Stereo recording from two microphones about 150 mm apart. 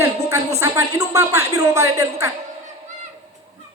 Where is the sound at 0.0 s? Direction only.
20° right (ahead or behind).